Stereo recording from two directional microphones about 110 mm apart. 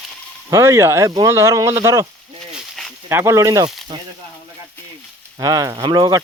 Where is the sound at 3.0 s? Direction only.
25° right (ahead or behind).